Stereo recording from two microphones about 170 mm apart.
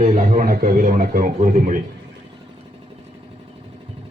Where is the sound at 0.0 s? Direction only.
40° right (ahead or behind).